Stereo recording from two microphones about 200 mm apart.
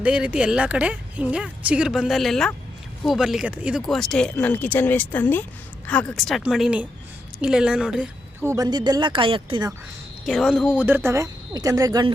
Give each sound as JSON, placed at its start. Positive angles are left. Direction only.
{"t": 0.0, "sound": "a woman's voice", "side_deg": -5}
{"t": 10.2, "sound": "speech", "side_deg": 0}